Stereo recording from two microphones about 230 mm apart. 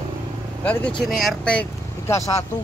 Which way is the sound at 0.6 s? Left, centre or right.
Centre.